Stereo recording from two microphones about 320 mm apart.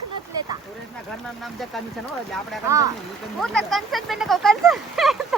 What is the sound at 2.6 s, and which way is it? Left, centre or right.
Speech, centre.